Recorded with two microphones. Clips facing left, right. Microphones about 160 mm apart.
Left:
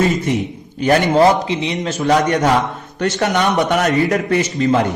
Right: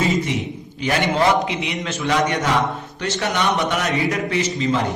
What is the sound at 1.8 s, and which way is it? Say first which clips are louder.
A man's voice: left 5 dB; 40° left (ahead or behind).